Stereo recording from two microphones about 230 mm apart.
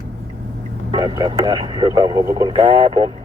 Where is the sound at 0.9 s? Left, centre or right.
Centre.